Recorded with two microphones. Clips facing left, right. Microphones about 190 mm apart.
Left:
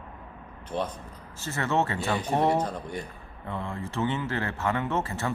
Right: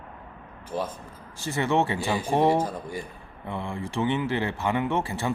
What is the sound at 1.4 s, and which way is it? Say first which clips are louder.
Speech: right 3 dB; 15° right (ahead or behind).